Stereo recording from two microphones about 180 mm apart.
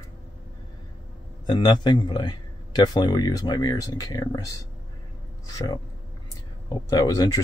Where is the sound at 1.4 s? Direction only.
25° left (ahead or behind).